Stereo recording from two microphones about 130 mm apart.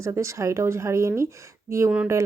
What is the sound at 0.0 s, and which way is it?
Speech, 25° right (ahead or behind).